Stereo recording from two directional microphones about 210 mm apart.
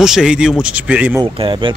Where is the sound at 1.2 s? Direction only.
25° right (ahead or behind).